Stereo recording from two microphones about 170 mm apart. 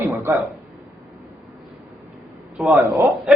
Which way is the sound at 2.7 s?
20° right (ahead or behind).